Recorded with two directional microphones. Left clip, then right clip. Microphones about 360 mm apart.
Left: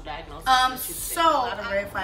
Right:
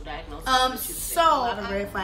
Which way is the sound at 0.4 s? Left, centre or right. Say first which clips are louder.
Left 2 dB; centre.